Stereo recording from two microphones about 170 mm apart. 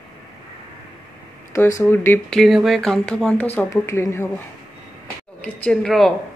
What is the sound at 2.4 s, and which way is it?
Speech, centre (ahead or behind).